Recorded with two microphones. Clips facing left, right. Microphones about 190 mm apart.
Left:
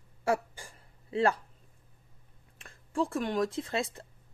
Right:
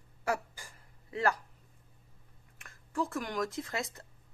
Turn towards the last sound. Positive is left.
turn(degrees=30)  # may be behind; listen again after turning